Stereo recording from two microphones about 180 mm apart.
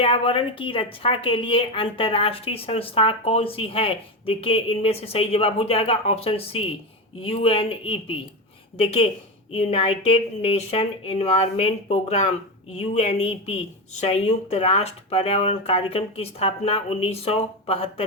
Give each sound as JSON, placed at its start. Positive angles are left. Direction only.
{"t": 0.0, "sound": "a woman's voice", "side_deg": 30}